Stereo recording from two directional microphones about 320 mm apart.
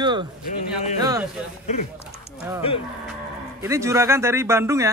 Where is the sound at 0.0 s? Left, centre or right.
Centre.